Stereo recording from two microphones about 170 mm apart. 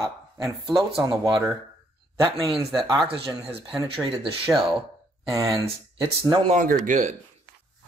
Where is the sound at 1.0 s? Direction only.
25° right (ahead or behind).